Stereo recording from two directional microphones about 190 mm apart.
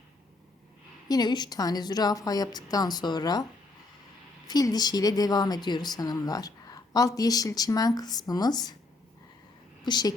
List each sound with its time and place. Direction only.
1.0 s speech: 20° left (ahead or behind)
4.4 s speech: 20° left (ahead or behind)
9.8 s a woman's voice: 20° left (ahead or behind)